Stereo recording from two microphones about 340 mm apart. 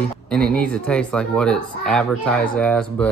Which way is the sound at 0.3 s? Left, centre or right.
Centre.